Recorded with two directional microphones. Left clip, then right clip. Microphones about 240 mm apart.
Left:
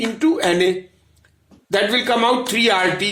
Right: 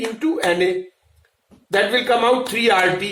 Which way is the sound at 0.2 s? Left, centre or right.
Left.